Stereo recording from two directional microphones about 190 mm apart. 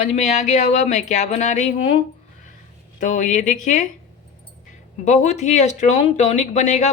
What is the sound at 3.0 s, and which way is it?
Speech, 40° left (ahead or behind).